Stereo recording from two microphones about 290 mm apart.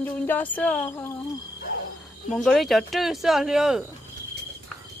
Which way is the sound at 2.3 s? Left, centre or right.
Centre.